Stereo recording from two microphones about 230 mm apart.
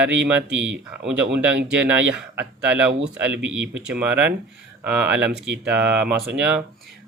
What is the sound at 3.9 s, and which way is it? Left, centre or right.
Speech, centre.